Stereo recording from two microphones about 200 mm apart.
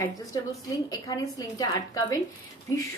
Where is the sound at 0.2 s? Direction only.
15° left (ahead or behind).